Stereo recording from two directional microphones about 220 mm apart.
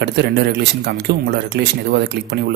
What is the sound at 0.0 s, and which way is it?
A man's voice, 50° right (ahead or behind).